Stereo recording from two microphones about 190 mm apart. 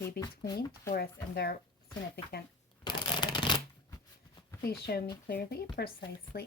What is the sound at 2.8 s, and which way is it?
Shuffling cards, 25° left (ahead or behind).